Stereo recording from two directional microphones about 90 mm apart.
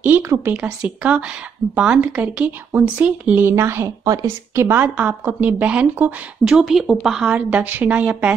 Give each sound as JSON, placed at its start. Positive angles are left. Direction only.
{"t": 0.0, "sound": "speech", "side_deg": -20}
{"t": 0.8, "sound": "a woman's voice", "side_deg": -15}
{"t": 6.4, "sound": "a woman's voice", "side_deg": -5}